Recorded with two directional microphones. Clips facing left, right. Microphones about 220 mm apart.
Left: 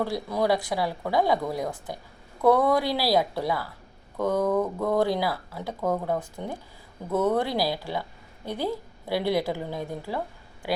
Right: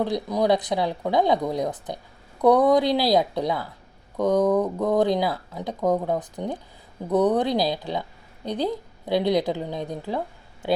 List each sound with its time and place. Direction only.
0.0 s speech: 15° right (ahead or behind)